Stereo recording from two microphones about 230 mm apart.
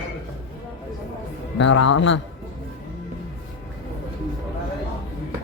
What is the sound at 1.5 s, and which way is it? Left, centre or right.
Speech, left.